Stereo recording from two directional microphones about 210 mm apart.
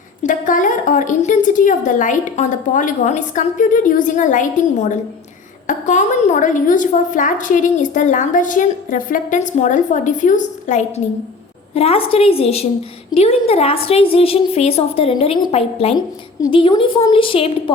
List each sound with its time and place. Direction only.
0.2 s a woman's voice: 40° left (ahead or behind)